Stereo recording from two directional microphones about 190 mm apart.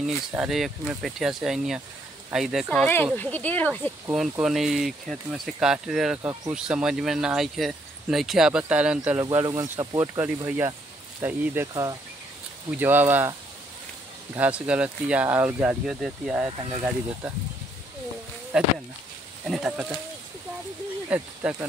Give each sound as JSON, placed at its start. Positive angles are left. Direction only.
{"t": 0.0, "sound": "speech", "side_deg": -5}
{"t": 4.1, "sound": "speech", "side_deg": -5}
{"t": 9.2, "sound": "speech", "side_deg": -20}
{"t": 14.3, "sound": "speech", "side_deg": -5}
{"t": 16.4, "sound": "speech", "side_deg": -25}
{"t": 18.5, "sound": "speech", "side_deg": -5}
{"t": 21.1, "sound": "speech", "side_deg": -10}